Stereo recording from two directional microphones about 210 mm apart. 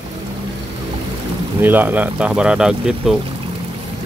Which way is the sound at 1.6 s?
10° right (ahead or behind).